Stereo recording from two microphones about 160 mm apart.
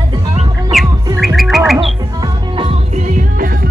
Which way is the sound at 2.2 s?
30° right (ahead or behind).